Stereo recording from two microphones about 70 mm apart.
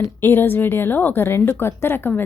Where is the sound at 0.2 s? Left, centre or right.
Left.